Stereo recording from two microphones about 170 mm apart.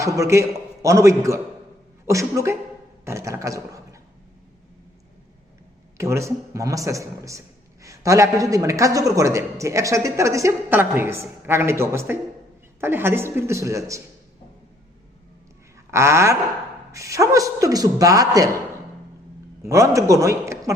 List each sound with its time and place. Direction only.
0.0 s a man's voice: 15° right (ahead or behind)
6.0 s a man's voice: 15° right (ahead or behind)
15.9 s a man's voice: 15° right (ahead or behind)
19.6 s a man's voice: 15° right (ahead or behind)